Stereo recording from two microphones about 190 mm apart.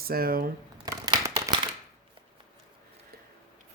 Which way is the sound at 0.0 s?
50° right (ahead or behind).